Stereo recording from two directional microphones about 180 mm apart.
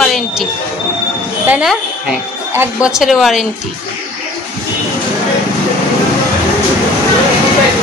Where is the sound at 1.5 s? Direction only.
5° right (ahead or behind).